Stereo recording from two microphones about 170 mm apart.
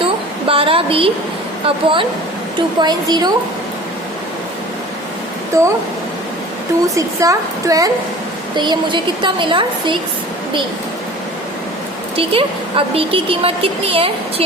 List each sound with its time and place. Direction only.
0.0 s a sound: 30° right (ahead or behind)
1.6 s a woman's voice: 30° right (ahead or behind)
5.5 s speech: 15° right (ahead or behind)
6.8 s a woman's voice: 20° right (ahead or behind)
12.1 s a woman's voice: 35° right (ahead or behind)